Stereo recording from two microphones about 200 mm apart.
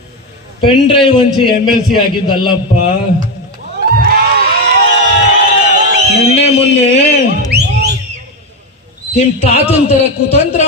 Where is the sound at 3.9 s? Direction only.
50° right (ahead or behind).